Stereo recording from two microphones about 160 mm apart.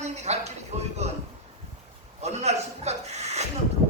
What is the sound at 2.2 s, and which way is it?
A man's voice, 45° right (ahead or behind).